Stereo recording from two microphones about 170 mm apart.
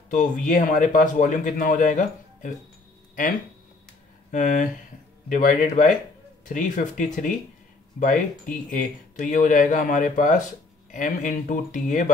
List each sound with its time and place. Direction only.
0.1 s speech: 50° left (ahead or behind)
4.3 s speech: 50° left (ahead or behind)